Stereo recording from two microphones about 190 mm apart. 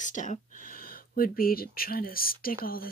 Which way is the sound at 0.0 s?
40° left (ahead or behind).